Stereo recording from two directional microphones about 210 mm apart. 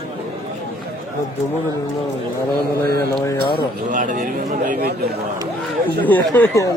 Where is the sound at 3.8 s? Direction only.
40° right (ahead or behind).